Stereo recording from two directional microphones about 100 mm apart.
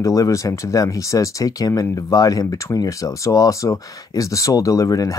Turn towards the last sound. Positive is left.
turn(degrees=35)  # may be behind; listen again after turning